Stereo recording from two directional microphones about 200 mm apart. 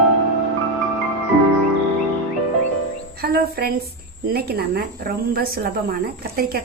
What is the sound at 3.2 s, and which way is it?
A woman's voice, 50° right (ahead or behind).